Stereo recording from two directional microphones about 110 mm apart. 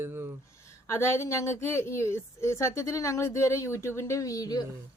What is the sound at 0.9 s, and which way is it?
A woman's voice, 25° left (ahead or behind).